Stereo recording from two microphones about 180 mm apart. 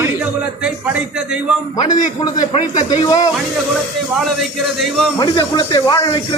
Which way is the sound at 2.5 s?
40° left (ahead or behind).